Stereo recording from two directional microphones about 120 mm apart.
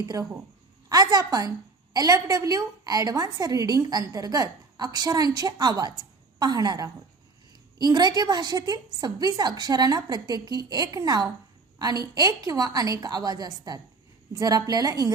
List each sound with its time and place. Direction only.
0.0 s a woman's voice: 30° right (ahead or behind)